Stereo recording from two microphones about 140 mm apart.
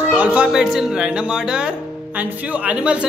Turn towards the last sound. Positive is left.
turn(degrees=-10)  # may be behind; listen again after turning